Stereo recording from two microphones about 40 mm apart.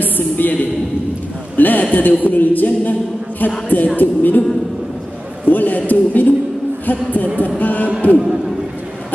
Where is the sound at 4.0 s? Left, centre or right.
Left.